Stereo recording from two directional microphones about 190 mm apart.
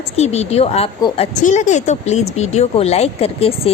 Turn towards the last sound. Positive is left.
turn(degrees=30)  # may be behind; listen again after turning